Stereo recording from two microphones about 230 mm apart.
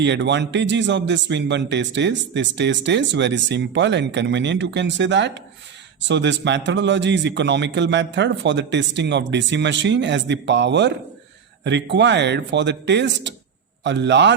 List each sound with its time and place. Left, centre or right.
0.0 s speech: right